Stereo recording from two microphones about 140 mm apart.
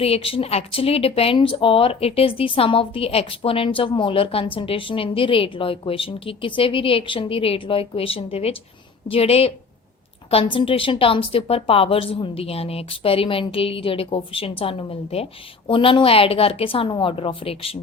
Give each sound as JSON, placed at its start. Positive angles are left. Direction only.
{"t": 0.0, "sound": "a woman's voice", "side_deg": 45}